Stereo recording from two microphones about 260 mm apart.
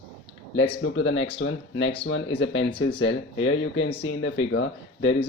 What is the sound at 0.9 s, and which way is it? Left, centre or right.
Speech, left.